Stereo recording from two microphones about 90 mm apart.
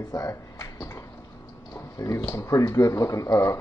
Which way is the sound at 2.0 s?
40° left (ahead or behind).